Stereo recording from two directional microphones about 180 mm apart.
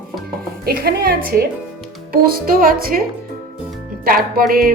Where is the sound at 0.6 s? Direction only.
60° right (ahead or behind).